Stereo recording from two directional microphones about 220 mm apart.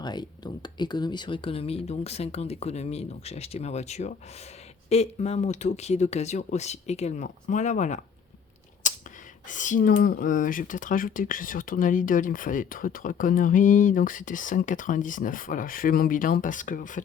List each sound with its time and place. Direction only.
0.0 s speech: 20° left (ahead or behind)
8.8 s a sound: 35° left (ahead or behind)
9.5 s speech: 35° left (ahead or behind)